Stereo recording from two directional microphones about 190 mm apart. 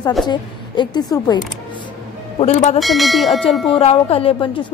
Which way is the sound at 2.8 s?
Centre (ahead or behind).